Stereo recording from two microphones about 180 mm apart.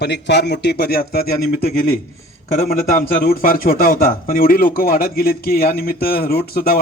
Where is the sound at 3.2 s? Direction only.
55° left (ahead or behind).